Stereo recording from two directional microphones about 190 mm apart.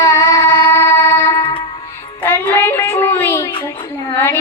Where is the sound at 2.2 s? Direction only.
10° left (ahead or behind).